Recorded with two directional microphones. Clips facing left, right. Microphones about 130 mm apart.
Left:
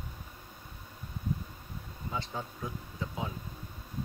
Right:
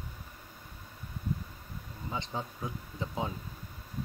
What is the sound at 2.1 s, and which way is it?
Speech, 20° right (ahead or behind).